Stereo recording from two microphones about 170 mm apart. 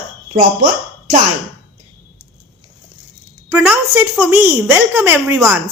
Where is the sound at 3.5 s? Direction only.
10° right (ahead or behind).